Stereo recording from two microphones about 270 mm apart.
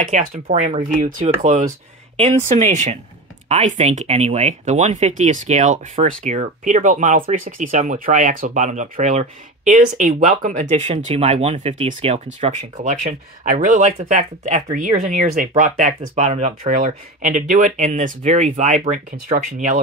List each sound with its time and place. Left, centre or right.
0.0 s speech: right